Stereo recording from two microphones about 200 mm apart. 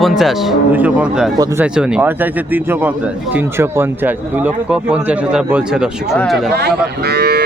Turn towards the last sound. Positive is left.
turn(degrees=-55)  # may be behind; listen again after turning